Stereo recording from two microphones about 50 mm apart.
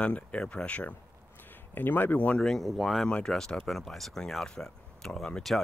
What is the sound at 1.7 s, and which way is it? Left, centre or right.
Speech, left.